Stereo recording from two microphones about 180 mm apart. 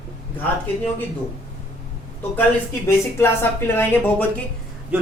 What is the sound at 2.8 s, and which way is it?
Speech, 15° left (ahead or behind).